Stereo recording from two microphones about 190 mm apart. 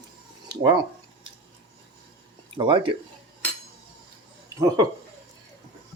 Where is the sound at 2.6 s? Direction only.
25° right (ahead or behind).